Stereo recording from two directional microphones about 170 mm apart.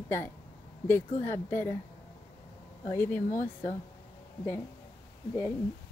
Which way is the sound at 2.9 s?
15° left (ahead or behind).